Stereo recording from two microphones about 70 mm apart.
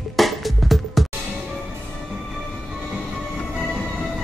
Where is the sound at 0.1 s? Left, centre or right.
Centre.